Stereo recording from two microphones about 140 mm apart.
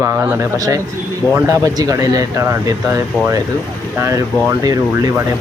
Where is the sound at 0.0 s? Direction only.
20° right (ahead or behind).